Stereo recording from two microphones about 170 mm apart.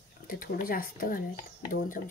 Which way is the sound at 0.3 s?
60° left (ahead or behind).